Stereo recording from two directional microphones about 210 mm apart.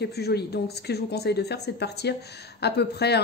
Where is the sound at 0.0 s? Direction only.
50° left (ahead or behind).